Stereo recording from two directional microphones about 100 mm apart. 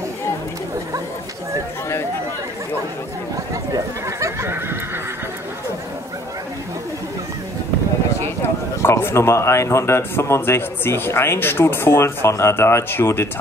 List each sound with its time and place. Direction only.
3.7 s neigh: 30° right (ahead or behind)
8.8 s speech: 25° left (ahead or behind)